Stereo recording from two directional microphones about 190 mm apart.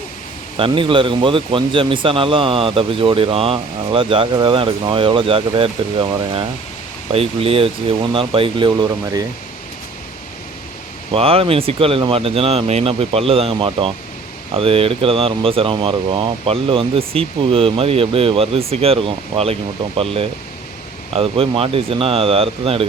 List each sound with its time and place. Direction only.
0.5 s speech: 25° right (ahead or behind)
11.1 s speech: 30° right (ahead or behind)